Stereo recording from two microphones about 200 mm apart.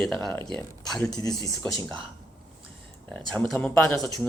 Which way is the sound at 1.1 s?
20° left (ahead or behind).